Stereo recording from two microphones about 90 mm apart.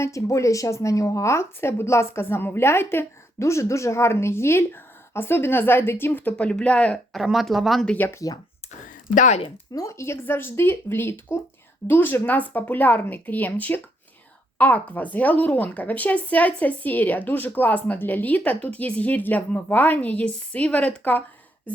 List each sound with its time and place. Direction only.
0.0 s speech: 35° left (ahead or behind)
6.3 s speech: 10° left (ahead or behind)
7.1 s speech: centre (ahead or behind)
7.9 s speech: 20° left (ahead or behind)
8.1 s speech: 40° left (ahead or behind)
9.7 s speech: 35° left (ahead or behind); by 21.2 s 20° left (ahead or behind)